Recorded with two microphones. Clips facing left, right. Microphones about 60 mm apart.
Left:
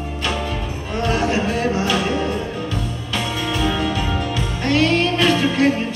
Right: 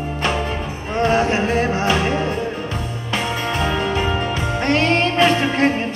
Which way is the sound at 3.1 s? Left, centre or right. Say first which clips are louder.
Right 2 dB; right.